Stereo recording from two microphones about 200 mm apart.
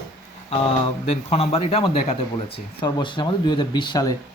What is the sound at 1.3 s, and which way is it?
Speech, 30° left (ahead or behind).